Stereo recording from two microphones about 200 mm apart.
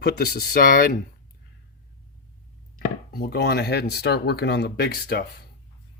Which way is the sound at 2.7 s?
50° left (ahead or behind).